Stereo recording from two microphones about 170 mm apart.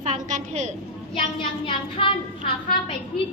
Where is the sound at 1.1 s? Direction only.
30° left (ahead or behind).